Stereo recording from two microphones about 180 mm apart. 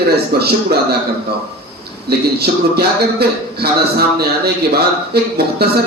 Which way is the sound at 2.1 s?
60° right (ahead or behind).